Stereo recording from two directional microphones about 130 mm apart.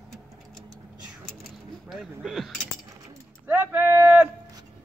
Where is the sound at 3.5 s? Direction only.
15° right (ahead or behind).